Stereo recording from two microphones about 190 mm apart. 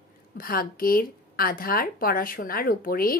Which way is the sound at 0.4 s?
50° left (ahead or behind).